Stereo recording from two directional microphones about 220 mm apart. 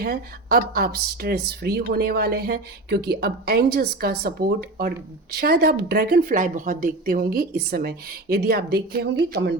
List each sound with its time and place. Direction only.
0.0 s speech: 40° right (ahead or behind)